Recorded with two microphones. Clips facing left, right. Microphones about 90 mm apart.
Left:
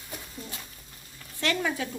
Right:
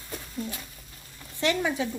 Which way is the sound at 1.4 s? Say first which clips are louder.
Right 2 dB; 15° right (ahead or behind).